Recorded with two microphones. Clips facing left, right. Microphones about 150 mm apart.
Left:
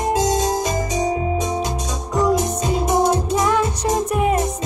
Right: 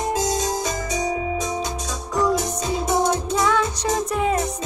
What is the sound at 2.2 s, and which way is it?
Music, 15° left (ahead or behind).